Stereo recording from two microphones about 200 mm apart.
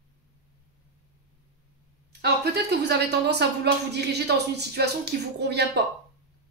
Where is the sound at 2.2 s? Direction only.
55° right (ahead or behind).